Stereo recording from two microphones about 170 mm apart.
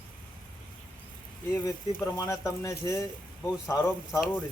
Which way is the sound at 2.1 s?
20° left (ahead or behind).